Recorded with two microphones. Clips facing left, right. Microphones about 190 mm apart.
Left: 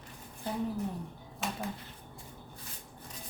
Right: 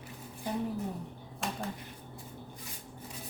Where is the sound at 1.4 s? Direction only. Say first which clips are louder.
Even; centre (ahead or behind).